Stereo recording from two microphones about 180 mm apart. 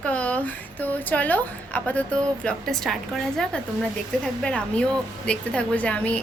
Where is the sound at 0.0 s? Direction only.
5° left (ahead or behind).